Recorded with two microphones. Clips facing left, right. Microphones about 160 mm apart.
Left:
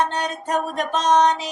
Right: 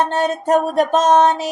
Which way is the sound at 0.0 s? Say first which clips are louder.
Right 5 dB; 50° right (ahead or behind).